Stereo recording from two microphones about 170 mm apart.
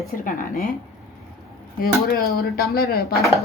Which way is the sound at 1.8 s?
60° left (ahead or behind).